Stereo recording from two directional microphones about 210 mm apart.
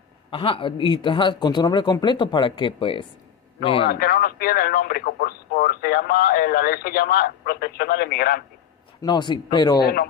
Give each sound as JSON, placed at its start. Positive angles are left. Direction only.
{"t": 0.3, "sound": "a man's voice", "side_deg": 25}
{"t": 3.9, "sound": "speech", "side_deg": 45}
{"t": 9.0, "sound": "a man's voice", "side_deg": 20}
{"t": 9.8, "sound": "speech", "side_deg": 45}